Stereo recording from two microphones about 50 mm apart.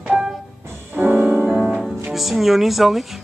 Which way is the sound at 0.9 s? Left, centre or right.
Right.